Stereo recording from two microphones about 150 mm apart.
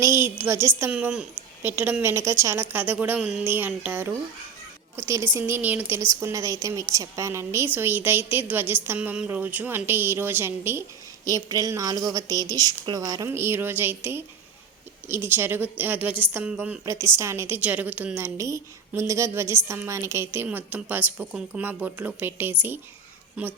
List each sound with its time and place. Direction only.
0.0 s a woman's voice: 15° right (ahead or behind)
16.8 s a woman's voice: 20° right (ahead or behind)